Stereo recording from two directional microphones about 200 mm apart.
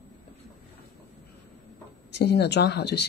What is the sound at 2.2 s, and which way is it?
Speech, 55° left (ahead or behind).